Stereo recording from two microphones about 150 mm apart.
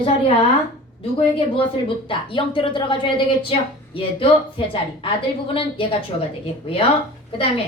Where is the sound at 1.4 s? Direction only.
35° left (ahead or behind).